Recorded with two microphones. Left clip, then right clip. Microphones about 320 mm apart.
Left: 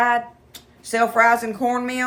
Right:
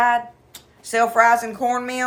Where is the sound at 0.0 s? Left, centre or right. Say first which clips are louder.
Right 1 dB; centre.